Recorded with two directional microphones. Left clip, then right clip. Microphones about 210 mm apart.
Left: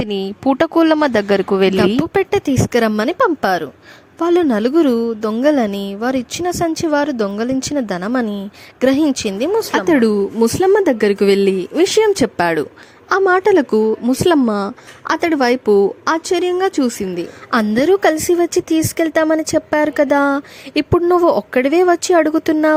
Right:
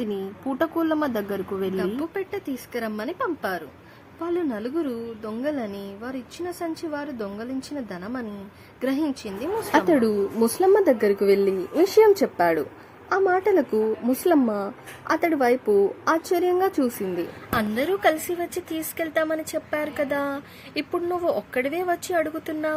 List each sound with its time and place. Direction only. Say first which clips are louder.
0.0 s a woman's voice: left 11 dB; 45° left (ahead or behind)
17.5 s a woman's voice: left 11 dB; 45° left (ahead or behind)